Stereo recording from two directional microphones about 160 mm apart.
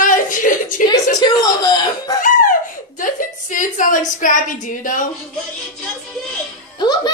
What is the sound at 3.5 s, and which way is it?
A woman's voice, 55° left (ahead or behind).